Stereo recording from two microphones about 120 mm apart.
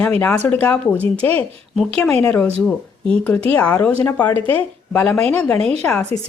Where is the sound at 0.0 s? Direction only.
10° left (ahead or behind).